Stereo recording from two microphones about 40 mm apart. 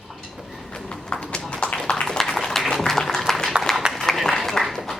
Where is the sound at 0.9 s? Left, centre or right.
Left.